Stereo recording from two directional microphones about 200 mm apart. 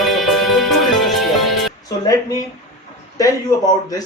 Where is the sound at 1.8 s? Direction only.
20° left (ahead or behind).